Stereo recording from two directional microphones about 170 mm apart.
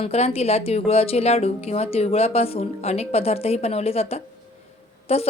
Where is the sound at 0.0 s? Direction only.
35° left (ahead or behind).